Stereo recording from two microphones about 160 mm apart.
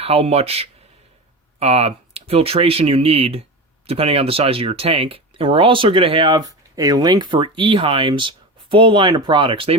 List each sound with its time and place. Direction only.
0.0 s speech: 40° right (ahead or behind)